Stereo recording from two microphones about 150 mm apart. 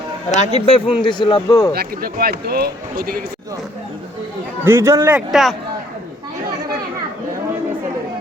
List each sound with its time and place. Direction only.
0.3 s a man's voice: 45° left (ahead or behind); by 1.7 s 25° left (ahead or behind)
1.7 s a man's voice: 90° right
4.6 s a man's voice: 20° right (ahead or behind)
5.1 s a man's voice: centre (ahead or behind)